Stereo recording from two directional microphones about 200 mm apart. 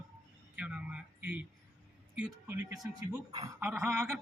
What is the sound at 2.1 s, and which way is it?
A man's voice, 10° right (ahead or behind).